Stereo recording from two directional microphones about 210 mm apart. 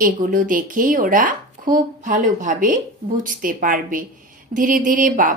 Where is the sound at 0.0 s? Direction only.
40° right (ahead or behind).